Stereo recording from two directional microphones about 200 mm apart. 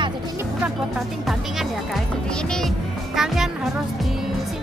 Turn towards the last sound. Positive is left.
turn(degrees=0)  # may be behind; listen again after turning